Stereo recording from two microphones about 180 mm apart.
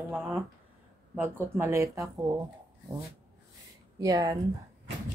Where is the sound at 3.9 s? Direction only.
20° right (ahead or behind).